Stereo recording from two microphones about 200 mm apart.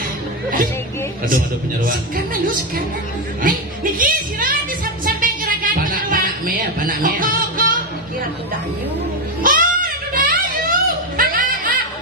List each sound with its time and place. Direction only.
3.4 s speech: 45° right (ahead or behind)
5.0 s music: 45° right (ahead or behind)
9.4 s a sound: 45° right (ahead or behind)